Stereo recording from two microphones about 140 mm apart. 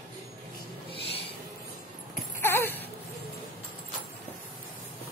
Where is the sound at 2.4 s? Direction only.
15° left (ahead or behind).